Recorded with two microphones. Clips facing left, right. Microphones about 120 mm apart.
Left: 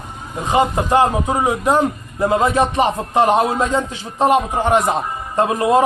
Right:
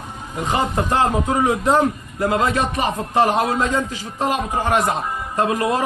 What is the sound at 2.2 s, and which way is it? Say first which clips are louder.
A man's voice: left 4 dB; 25° left (ahead or behind).